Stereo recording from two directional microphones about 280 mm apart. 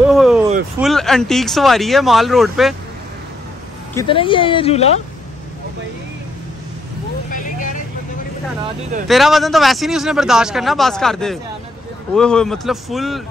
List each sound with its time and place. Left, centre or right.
0.1 s a sound: centre
0.7 s speech: centre
3.9 s speech: centre
7.3 s vehicle: left
9.0 s speech: centre